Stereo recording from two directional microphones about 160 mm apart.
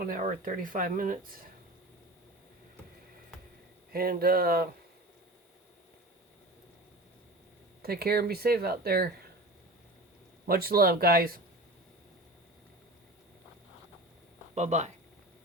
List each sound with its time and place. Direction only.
0.0 s speech: 60° right (ahead or behind)
3.9 s speech: 65° right (ahead or behind)
7.8 s speech: 75° right (ahead or behind)
10.4 s speech: 70° right (ahead or behind)
14.5 s speech: 45° right (ahead or behind)